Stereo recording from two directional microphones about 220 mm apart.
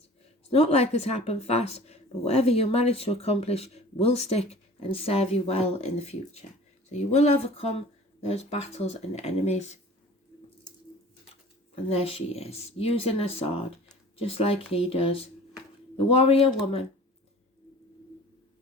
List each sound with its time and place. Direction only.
0.5 s speech: 30° left (ahead or behind)
11.7 s speech: 25° left (ahead or behind)